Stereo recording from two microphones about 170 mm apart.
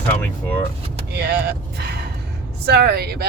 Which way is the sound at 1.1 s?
75° right (ahead or behind).